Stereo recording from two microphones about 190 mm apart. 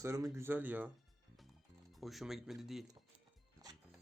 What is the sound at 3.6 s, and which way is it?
Music, 20° right (ahead or behind).